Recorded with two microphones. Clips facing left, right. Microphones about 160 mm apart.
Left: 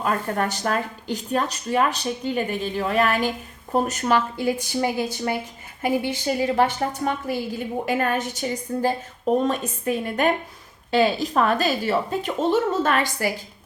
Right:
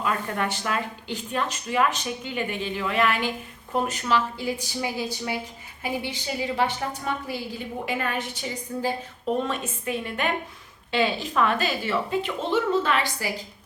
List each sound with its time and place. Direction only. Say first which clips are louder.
0.0 s a woman's voice: left 3 dB; 40° left (ahead or behind)